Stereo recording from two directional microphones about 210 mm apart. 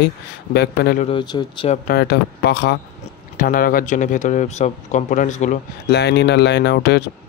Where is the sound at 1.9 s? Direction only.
50° left (ahead or behind).